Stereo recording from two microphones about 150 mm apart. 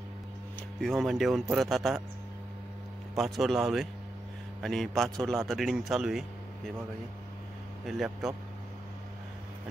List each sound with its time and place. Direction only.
0.7 s speech: centre (ahead or behind)
3.2 s speech: centre (ahead or behind)
7.8 s speech: centre (ahead or behind)